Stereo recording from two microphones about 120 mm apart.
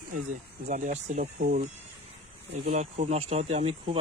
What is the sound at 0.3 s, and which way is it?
Speech, 90° right.